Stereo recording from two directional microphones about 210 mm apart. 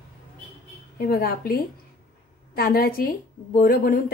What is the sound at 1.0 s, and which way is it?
Speech, 45° left (ahead or behind).